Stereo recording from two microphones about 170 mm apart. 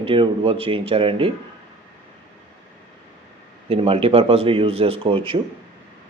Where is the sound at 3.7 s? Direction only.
35° right (ahead or behind).